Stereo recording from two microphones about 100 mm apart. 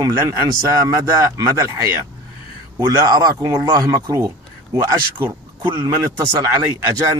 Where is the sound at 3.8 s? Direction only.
30° right (ahead or behind).